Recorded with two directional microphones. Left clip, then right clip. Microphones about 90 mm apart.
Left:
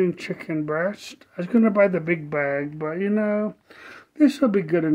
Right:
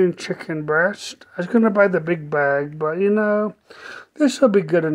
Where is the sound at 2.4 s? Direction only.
20° right (ahead or behind).